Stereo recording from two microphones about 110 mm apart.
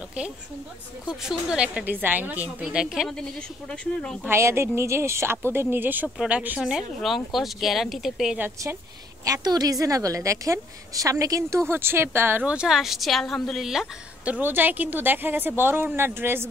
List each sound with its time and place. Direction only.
1.2 s a woman's voice: 10° right (ahead or behind)
4.0 s speech: 5° left (ahead or behind)
4.3 s a woman's voice: 25° right (ahead or behind); by 8.4 s 5° right (ahead or behind)
9.2 s a woman's voice: 35° right (ahead or behind)